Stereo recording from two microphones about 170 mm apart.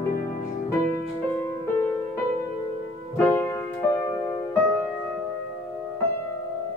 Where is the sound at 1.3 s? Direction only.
15° left (ahead or behind).